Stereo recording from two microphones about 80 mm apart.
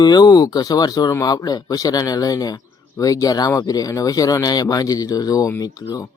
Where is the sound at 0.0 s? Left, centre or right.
Left.